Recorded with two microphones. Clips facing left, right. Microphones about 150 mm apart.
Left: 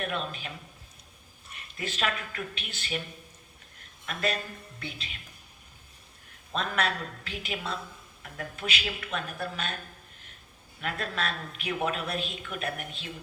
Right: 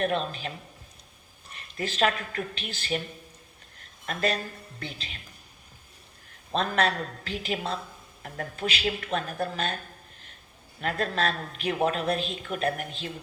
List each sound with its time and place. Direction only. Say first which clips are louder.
0.0 s speech: right 6 dB; 35° right (ahead or behind)
1.5 s speech: right 6 dB; 35° right (ahead or behind)
4.0 s speech: right 3 dB; 40° right (ahead or behind)
6.5 s speech: right 4 dB; 35° right (ahead or behind)
10.8 s speech: right 5 dB; 40° right (ahead or behind)